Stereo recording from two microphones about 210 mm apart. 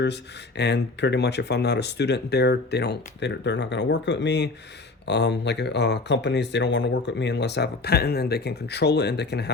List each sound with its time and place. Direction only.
0.0 s speech: 55° left (ahead or behind)